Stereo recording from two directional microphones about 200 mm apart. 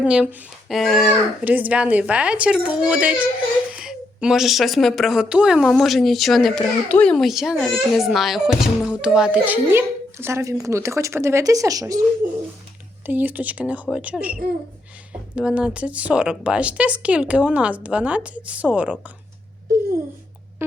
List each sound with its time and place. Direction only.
0.0 s a child's voice: 5° right (ahead or behind)
12.2 s bird: 45° right (ahead or behind)
13.1 s a child's voice: 10° right (ahead or behind)
15.4 s a child's voice: 5° right (ahead or behind)
20.6 s a sound: 10° right (ahead or behind)